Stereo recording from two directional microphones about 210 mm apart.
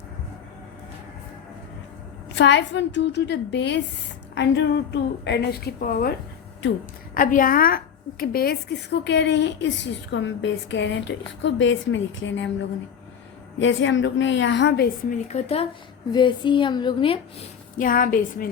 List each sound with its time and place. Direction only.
2.3 s a woman's voice: 55° left (ahead or behind)
13.6 s a woman's voice: 60° left (ahead or behind)
15.1 s a woman's voice: 35° left (ahead or behind)
17.7 s a woman's voice: 40° left (ahead or behind)